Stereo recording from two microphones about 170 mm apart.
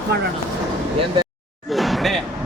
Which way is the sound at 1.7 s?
Centre (ahead or behind).